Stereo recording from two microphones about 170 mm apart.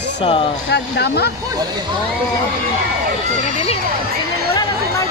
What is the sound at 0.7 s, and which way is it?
Speech, 80° left.